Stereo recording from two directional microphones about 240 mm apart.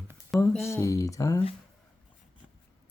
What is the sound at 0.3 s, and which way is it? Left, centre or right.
Speech, centre.